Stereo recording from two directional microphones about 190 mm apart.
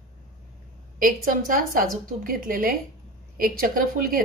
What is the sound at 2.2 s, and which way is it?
A woman's voice, 45° right (ahead or behind).